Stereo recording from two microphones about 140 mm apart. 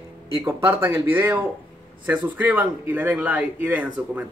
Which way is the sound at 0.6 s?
15° right (ahead or behind).